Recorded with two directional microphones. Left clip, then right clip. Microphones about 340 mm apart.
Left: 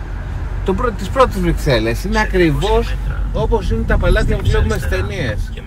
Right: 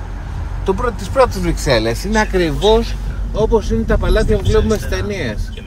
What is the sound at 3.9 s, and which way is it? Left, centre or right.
Speech, centre.